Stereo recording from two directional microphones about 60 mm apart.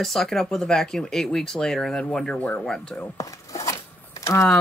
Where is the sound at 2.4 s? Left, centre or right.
Left.